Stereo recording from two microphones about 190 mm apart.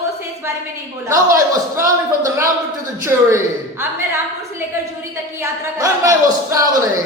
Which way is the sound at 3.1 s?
15° right (ahead or behind).